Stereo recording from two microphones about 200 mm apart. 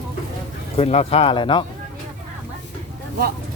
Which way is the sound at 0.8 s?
30° left (ahead or behind).